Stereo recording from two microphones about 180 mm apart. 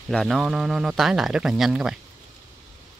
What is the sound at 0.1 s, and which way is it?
A man's voice, centre (ahead or behind).